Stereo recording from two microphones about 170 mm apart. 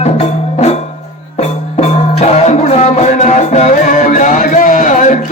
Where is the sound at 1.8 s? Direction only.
40° left (ahead or behind).